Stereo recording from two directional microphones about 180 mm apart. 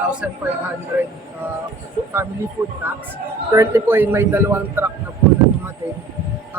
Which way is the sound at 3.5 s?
15° right (ahead or behind).